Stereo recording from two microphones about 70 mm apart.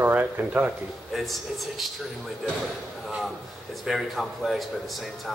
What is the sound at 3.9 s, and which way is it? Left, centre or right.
Speech, centre.